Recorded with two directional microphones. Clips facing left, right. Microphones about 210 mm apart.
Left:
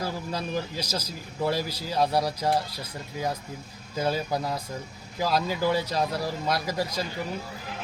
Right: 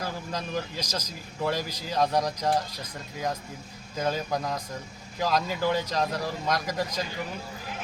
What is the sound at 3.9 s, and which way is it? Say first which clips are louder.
Speech: left 1 dB; 10° left (ahead or behind).